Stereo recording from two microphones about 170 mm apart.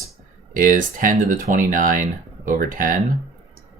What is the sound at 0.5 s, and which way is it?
Speech, 50° right (ahead or behind).